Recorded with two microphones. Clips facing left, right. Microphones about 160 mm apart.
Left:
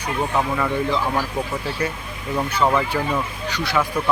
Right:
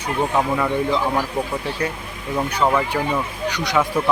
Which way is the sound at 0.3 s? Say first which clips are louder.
Right 1 dB; 5° right (ahead or behind).